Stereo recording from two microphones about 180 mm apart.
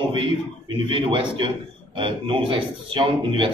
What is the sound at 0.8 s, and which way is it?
A man's voice, 30° right (ahead or behind).